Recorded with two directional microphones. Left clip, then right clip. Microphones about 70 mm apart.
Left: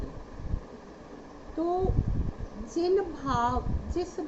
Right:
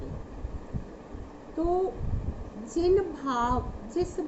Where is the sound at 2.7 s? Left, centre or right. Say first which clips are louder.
Right 2 dB; right.